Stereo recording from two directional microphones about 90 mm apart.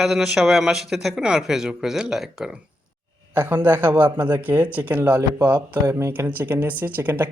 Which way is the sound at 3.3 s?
20° right (ahead or behind).